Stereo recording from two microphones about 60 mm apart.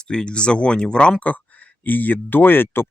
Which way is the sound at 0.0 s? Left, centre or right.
Centre.